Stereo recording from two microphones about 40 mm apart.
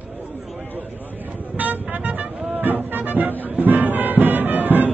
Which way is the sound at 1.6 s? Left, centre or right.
Right.